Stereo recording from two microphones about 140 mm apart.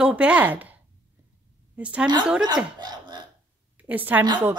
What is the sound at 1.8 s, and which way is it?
Speech, 10° right (ahead or behind).